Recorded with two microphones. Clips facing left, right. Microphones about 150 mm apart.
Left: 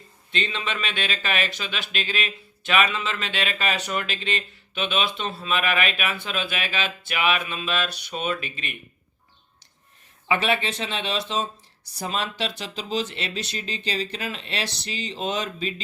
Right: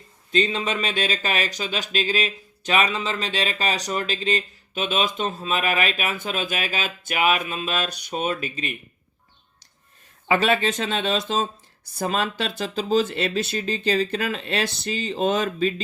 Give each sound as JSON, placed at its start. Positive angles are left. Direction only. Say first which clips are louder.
{"t": 0.3, "sound": "speech", "louder": "right 6 dB", "side_deg": -40}
{"t": 10.2, "sound": "speech", "louder": "right 3 dB", "side_deg": -40}